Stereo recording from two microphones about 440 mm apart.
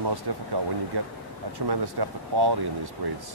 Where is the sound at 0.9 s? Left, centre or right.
Right.